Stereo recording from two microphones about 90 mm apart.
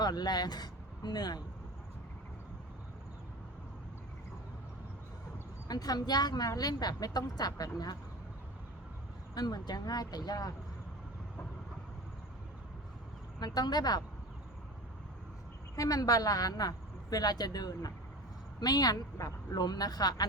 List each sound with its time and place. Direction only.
0.0 s speech: 50° left (ahead or behind)
5.6 s a woman's voice: 45° left (ahead or behind)
9.3 s a woman's voice: 50° left (ahead or behind)
13.4 s a woman's voice: 50° left (ahead or behind)
15.7 s a woman's voice: 40° left (ahead or behind)